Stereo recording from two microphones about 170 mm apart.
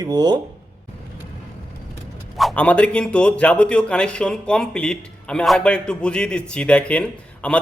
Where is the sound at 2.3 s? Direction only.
5° left (ahead or behind).